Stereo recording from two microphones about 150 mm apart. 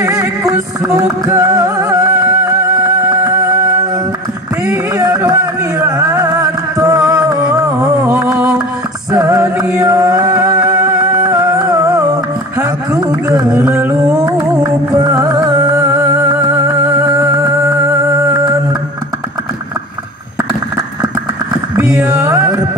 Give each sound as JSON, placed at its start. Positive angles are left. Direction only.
{"t": 0.0, "sound": "music", "side_deg": -20}
{"t": 4.9, "sound": "music", "side_deg": -25}
{"t": 21.9, "sound": "mantra", "side_deg": -20}